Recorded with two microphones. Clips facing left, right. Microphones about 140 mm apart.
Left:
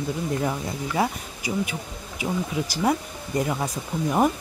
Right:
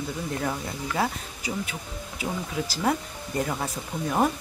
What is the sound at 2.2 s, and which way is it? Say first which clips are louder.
Speech: left 4 dB; 15° left (ahead or behind).